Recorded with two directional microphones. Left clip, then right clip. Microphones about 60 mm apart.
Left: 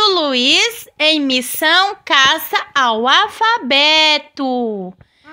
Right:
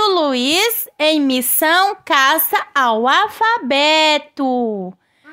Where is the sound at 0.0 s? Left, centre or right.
Right.